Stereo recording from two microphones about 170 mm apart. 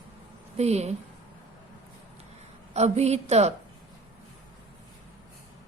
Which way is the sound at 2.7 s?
40° right (ahead or behind).